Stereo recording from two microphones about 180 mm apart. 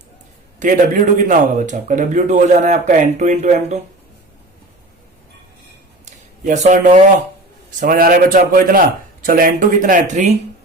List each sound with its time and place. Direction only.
0.6 s speech: 50° right (ahead or behind)
6.4 s speech: 40° right (ahead or behind)
7.8 s speech: 55° right (ahead or behind)